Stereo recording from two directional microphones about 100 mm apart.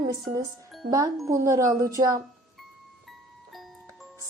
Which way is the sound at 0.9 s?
40° right (ahead or behind).